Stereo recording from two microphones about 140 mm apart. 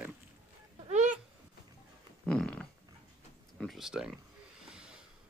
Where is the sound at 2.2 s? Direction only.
5° left (ahead or behind).